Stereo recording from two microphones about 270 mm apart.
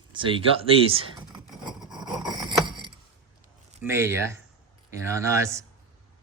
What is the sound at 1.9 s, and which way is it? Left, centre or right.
Vehicle, centre.